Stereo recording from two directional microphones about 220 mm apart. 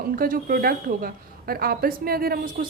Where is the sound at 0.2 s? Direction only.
40° right (ahead or behind).